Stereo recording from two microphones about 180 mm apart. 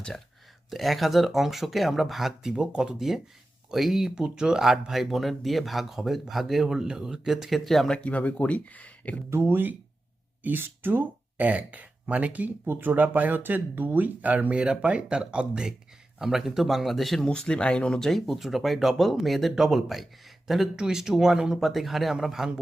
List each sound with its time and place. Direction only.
0.7 s speech: centre (ahead or behind)
9.3 s speech: 10° right (ahead or behind)